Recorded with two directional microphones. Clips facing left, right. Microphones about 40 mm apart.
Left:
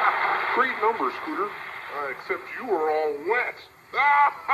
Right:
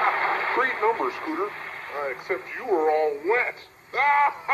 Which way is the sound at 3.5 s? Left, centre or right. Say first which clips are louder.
Even; left.